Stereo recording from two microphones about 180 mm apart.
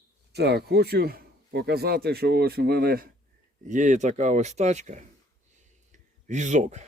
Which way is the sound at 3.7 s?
45° right (ahead or behind).